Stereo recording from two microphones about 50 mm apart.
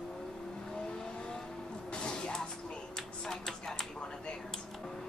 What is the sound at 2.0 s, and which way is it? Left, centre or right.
Music, centre.